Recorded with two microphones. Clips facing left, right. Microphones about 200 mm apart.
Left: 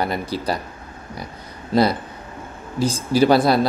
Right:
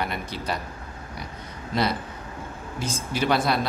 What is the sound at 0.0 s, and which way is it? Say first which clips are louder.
Speech: left 7 dB; 35° left (ahead or behind).